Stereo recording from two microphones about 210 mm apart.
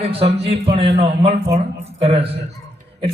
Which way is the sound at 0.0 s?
25° right (ahead or behind).